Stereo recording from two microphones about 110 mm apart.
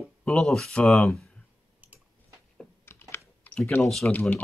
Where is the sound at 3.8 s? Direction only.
5° left (ahead or behind).